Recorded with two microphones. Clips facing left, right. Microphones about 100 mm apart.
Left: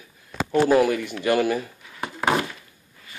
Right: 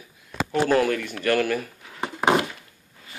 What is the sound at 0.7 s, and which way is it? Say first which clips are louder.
Speech: left 2 dB; 10° left (ahead or behind).